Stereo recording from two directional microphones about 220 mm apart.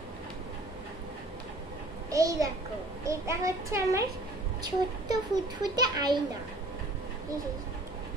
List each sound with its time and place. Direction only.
2.0 s a child's voice: 15° right (ahead or behind)
5.0 s a child's voice: 20° right (ahead or behind)